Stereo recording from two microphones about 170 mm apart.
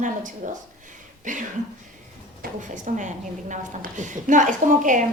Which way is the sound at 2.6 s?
45° right (ahead or behind).